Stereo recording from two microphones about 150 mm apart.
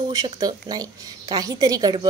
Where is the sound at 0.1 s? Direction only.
25° right (ahead or behind).